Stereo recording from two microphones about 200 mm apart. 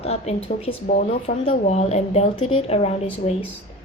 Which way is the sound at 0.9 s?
40° left (ahead or behind).